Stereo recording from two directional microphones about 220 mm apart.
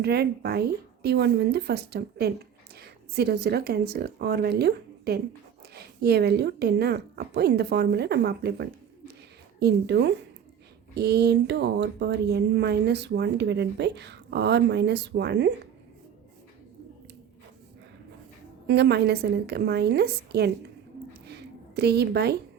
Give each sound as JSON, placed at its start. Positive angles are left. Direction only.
{"t": 0.0, "sound": "speech", "side_deg": -45}
{"t": 18.7, "sound": "speech", "side_deg": -50}
{"t": 21.1, "sound": "a sound", "side_deg": -50}